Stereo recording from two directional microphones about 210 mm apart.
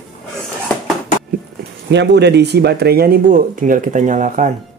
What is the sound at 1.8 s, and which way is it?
Speech, 55° right (ahead or behind).